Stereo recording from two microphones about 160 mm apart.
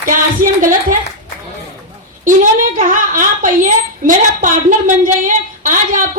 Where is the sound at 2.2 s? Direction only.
55° right (ahead or behind).